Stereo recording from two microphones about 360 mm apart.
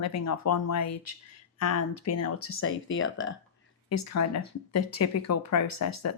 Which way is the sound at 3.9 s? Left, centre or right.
Left.